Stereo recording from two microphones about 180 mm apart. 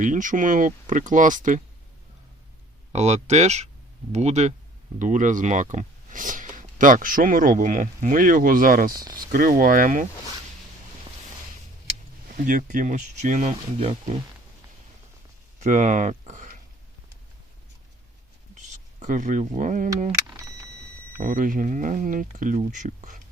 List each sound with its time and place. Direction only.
0.0 s speech: 45° right (ahead or behind)
2.9 s speech: 40° right (ahead or behind)
8.9 s speech: 20° right (ahead or behind)
9.1 s speech: 50° right (ahead or behind)
12.3 s speech: 45° right (ahead or behind)
15.6 s speech: 40° right (ahead or behind)
18.5 s a sound: 45° right (ahead or behind)
21.2 s speech: 50° right (ahead or behind)